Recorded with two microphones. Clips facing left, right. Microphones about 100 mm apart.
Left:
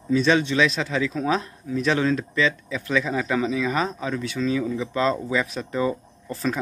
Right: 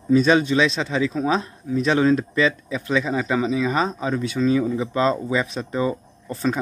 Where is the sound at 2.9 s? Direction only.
10° right (ahead or behind).